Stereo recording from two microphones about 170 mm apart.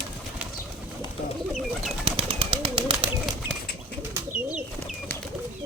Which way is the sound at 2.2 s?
35° right (ahead or behind).